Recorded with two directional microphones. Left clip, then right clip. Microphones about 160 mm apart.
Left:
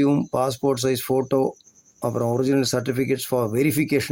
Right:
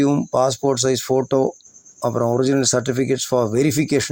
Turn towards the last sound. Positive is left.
turn(degrees=-25)  # may be behind; listen again after turning